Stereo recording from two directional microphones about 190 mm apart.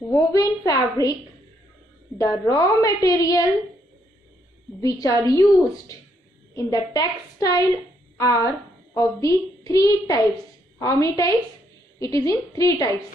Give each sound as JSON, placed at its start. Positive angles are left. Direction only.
{"t": 0.0, "sound": "a woman's voice", "side_deg": 15}
{"t": 2.1, "sound": "a woman's voice", "side_deg": 15}
{"t": 4.8, "sound": "a woman's voice", "side_deg": 20}